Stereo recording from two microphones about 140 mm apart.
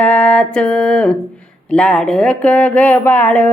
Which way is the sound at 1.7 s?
5° left (ahead or behind).